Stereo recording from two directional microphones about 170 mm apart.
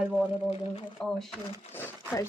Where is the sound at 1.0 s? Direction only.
5° left (ahead or behind).